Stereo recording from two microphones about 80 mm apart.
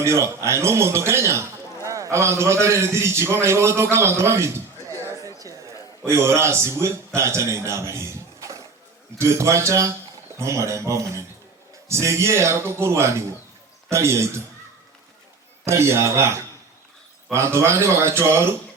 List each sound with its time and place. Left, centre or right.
0.0 s a man's voice: right
15.6 s speech: right